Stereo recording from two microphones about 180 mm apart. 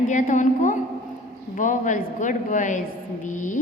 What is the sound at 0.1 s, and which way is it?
A woman's voice, 45° left (ahead or behind).